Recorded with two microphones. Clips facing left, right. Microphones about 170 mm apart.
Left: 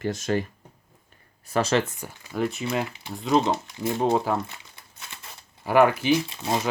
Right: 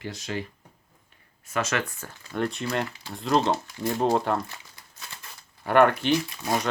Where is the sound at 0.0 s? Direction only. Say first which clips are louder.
Left 7 dB; 45° left (ahead or behind).